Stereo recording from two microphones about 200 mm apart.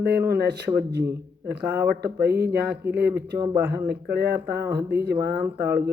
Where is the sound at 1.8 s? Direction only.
55° right (ahead or behind).